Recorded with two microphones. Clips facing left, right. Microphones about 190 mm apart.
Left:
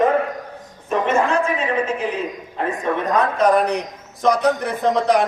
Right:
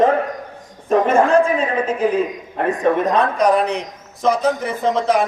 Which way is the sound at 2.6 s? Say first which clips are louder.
Right 4 dB; 55° right (ahead or behind).